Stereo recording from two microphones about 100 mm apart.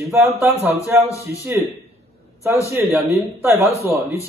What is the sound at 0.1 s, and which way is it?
Speech, 20° right (ahead or behind).